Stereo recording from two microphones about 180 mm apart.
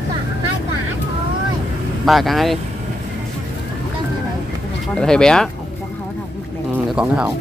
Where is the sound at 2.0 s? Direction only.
Centre (ahead or behind).